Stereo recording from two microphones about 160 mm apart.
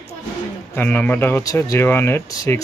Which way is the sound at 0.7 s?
10° left (ahead or behind).